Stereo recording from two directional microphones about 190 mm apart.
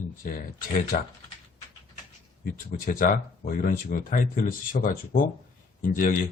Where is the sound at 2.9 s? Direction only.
45° left (ahead or behind).